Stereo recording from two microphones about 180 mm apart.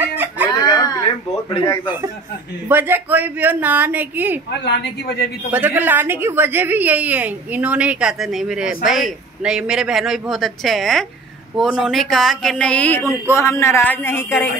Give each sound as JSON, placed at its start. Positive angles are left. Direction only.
{"t": 0.0, "sound": "chicken", "side_deg": -10}
{"t": 0.6, "sound": "a sound", "side_deg": 20}
{"t": 2.7, "sound": "a man's voice", "side_deg": -10}
{"t": 4.6, "sound": "a woman's voice", "side_deg": 65}
{"t": 5.5, "sound": "a woman's voice", "side_deg": -10}